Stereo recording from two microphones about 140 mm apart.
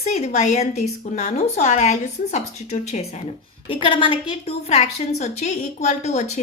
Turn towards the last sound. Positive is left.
turn(degrees=55)  # may be behind; listen again after turning